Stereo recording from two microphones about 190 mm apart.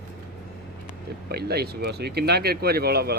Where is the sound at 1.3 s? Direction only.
55° right (ahead or behind).